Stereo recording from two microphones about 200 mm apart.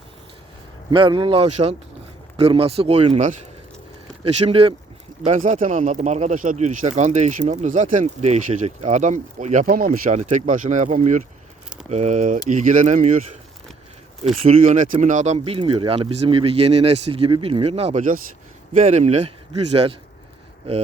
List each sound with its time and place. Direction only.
0.9 s speech: 25° right (ahead or behind)
14.4 s speech: 40° right (ahead or behind)